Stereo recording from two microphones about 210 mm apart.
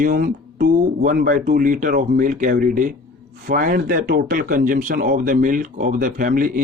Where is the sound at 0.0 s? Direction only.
45° right (ahead or behind).